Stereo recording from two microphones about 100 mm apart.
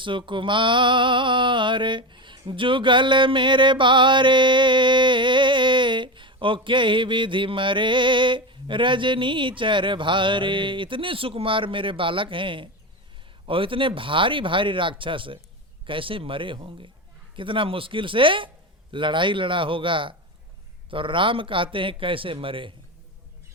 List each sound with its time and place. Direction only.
0.0 s mantra: 55° right (ahead or behind)